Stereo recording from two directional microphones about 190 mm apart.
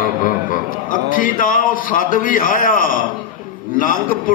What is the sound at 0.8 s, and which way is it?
A man's voice, 45° left (ahead or behind).